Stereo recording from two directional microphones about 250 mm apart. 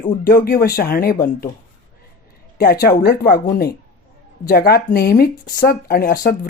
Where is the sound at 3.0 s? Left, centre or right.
Left.